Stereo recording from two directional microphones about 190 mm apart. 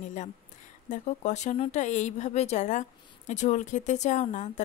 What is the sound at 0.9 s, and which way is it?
A woman's voice, 40° left (ahead or behind).